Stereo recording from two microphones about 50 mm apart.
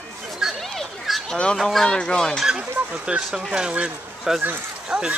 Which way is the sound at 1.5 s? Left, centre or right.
Centre.